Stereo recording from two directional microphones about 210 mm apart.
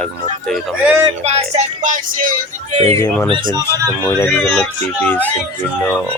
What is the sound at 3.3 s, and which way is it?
Speech, 20° right (ahead or behind).